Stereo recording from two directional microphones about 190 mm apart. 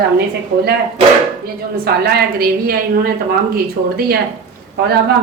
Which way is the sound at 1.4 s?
55° right (ahead or behind).